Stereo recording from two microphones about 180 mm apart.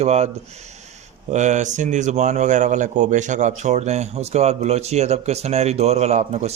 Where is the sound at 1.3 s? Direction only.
40° right (ahead or behind).